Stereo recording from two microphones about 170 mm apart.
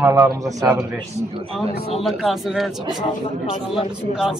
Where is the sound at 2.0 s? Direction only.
Centre (ahead or behind).